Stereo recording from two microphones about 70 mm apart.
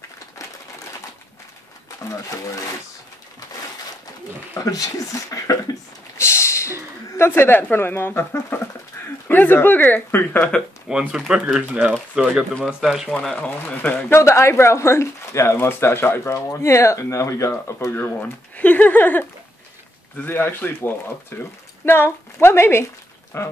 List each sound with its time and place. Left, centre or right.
2.0 s speech: left
4.6 s speech: left
6.1 s speech: left
9.0 s bird: left
9.3 s a woman's voice: left
10.9 s speech: centre
13.3 s a woman's voice: left
14.2 s speech: left
18.2 s a woman's voice: left